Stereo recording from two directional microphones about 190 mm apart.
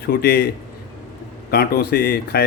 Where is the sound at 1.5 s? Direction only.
55° left (ahead or behind).